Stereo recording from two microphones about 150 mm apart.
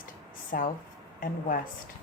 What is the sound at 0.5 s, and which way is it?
A woman's voice, 65° left (ahead or behind).